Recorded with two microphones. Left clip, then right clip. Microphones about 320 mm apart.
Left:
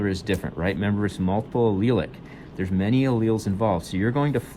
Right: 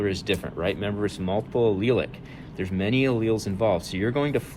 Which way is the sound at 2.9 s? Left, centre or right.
Left.